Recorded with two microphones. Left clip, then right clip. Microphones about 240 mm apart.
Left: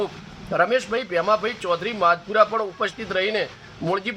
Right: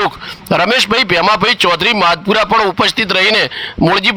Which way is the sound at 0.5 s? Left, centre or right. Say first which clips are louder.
Right 9 dB; right.